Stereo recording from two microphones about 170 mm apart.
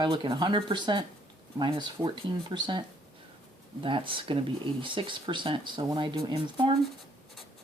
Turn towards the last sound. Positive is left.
turn(degrees=-25)  # may be behind; listen again after turning